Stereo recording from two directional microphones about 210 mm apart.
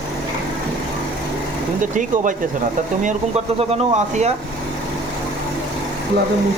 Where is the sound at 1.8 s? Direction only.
35° right (ahead or behind).